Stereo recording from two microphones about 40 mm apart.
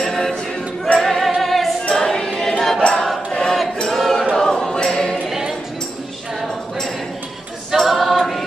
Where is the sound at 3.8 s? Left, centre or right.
Centre.